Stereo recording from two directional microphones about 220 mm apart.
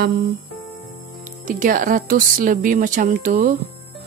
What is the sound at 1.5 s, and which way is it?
Speech, 40° right (ahead or behind).